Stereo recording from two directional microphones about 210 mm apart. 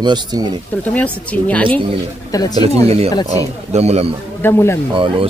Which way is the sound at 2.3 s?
15° left (ahead or behind).